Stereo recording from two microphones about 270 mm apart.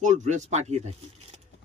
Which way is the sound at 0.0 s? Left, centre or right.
Right.